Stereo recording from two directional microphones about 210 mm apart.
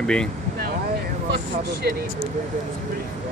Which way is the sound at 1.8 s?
50° right (ahead or behind).